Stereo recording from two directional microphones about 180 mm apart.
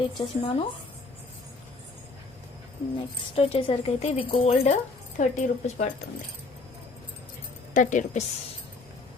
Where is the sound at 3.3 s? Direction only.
35° left (ahead or behind).